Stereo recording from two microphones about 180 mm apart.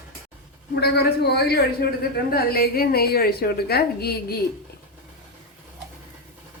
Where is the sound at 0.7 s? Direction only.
65° left (ahead or behind).